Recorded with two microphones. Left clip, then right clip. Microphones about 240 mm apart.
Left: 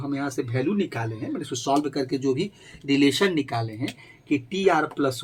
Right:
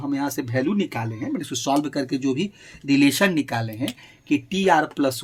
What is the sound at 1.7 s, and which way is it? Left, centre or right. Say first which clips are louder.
Speech: even; right.